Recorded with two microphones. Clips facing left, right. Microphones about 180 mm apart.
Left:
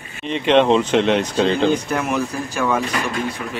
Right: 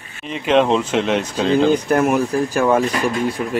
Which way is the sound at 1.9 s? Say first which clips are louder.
Right 6 dB; 50° right (ahead or behind).